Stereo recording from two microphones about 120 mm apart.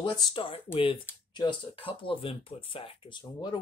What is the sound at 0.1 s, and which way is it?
Speech, 40° left (ahead or behind).